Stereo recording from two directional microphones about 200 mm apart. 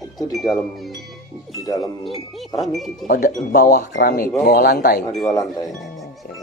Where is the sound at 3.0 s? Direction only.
45° left (ahead or behind).